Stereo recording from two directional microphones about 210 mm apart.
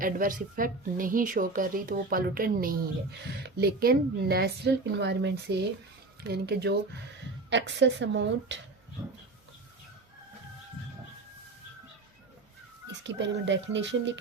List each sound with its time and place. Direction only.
0.0 s a woman's voice: 40° right (ahead or behind); by 8.5 s 60° right (ahead or behind)
13.1 s speech: 60° right (ahead or behind)